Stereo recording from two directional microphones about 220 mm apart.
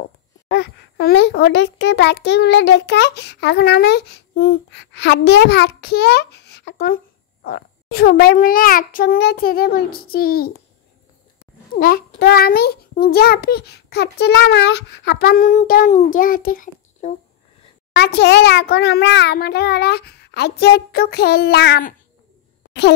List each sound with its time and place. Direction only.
0.5 s a child's voice: 50° left (ahead or behind)
11.8 s a child's voice: 45° left (ahead or behind)
17.9 s a child's voice: 50° left (ahead or behind)